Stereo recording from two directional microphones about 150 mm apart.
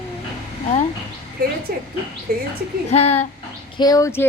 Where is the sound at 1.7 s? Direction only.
90° right.